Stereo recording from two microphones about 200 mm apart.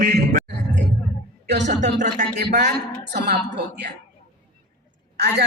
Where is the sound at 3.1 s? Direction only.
55° right (ahead or behind).